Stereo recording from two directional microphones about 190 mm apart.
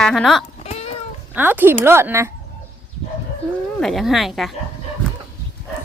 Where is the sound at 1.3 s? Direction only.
10° right (ahead or behind).